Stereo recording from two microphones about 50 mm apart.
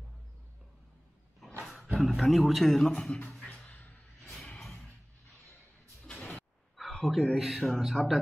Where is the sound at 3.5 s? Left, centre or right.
Left.